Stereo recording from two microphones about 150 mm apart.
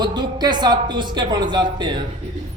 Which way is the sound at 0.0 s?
30° right (ahead or behind).